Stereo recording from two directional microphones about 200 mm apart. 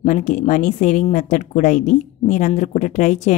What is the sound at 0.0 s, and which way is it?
A woman's voice, 40° left (ahead or behind).